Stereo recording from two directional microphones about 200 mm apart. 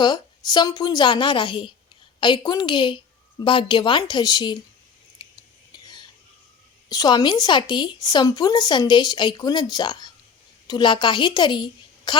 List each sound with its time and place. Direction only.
0.0 s a woman's voice: 20° left (ahead or behind)
5.8 s a sound: 20° left (ahead or behind)
6.8 s a woman's voice: 20° left (ahead or behind)